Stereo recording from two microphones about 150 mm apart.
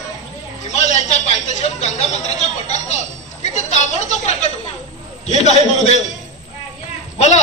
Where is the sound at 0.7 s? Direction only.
50° left (ahead or behind).